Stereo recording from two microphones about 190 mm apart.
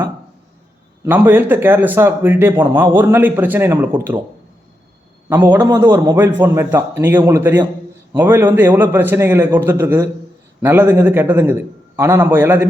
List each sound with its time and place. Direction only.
1.0 s speech: 10° right (ahead or behind)
5.3 s speech: 10° right (ahead or behind)